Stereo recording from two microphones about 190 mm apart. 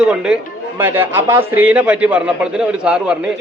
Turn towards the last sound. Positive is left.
turn(degrees=-5)  # may be behind; listen again after turning